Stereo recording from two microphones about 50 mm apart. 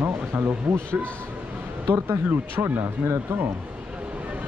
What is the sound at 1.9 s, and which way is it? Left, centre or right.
Speech, right.